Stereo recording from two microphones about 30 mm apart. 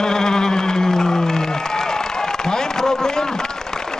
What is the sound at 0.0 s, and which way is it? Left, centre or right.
Music, left.